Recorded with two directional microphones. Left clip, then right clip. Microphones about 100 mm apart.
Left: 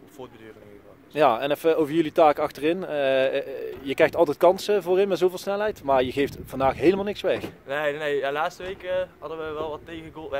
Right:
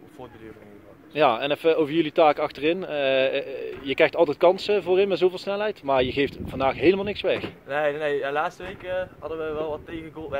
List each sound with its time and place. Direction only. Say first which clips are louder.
1.1 s speech: even; 65° left (ahead or behind)
7.6 s speech: right 2 dB; 30° left (ahead or behind)